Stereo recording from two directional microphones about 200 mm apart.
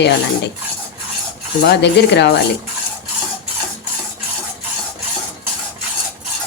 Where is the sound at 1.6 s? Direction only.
60° left (ahead or behind).